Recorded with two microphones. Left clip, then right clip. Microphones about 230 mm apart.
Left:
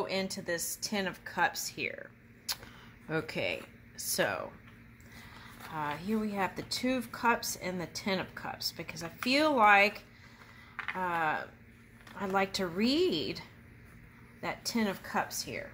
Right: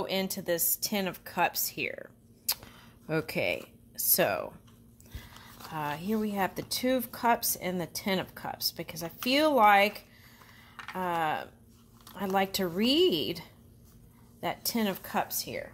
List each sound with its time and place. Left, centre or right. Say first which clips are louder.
0.0 s speech: right 2 dB; right
3.1 s speech: right 4 dB; right
5.7 s speech: right 2 dB; right